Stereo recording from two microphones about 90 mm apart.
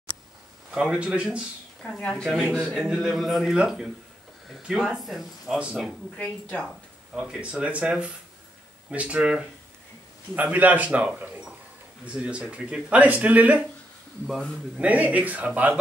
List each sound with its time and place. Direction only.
0.7 s speech: 10° right (ahead or behind)
2.0 s a woman's voice: 10° left (ahead or behind)
6.1 s a woman's voice: 10° left (ahead or behind)
7.2 s speech: 10° right (ahead or behind)
14.2 s speech: centre (ahead or behind)
14.8 s speech: 15° right (ahead or behind)